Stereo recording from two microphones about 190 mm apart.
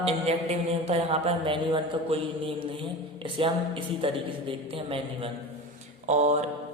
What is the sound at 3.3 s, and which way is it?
A man's voice, 25° right (ahead or behind).